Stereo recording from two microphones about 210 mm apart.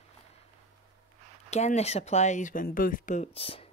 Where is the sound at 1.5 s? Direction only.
30° left (ahead or behind).